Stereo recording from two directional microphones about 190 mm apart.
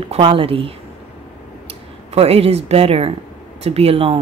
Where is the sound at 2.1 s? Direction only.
30° right (ahead or behind).